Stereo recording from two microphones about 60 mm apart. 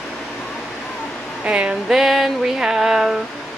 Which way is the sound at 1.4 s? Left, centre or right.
Centre.